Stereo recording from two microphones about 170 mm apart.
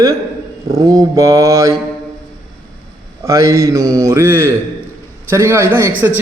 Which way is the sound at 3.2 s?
20° right (ahead or behind).